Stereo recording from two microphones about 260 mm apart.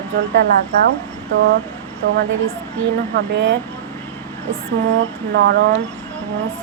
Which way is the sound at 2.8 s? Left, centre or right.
Right.